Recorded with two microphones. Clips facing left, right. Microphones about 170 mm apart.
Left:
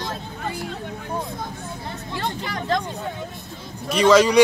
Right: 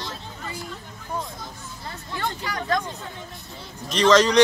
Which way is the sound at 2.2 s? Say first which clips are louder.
Left 1 dB; 25° left (ahead or behind).